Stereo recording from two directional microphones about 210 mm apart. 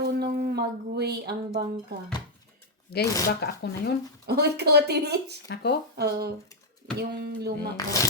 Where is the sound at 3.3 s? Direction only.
50° left (ahead or behind).